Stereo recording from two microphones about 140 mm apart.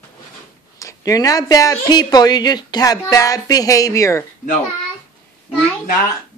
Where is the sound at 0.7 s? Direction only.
25° left (ahead or behind).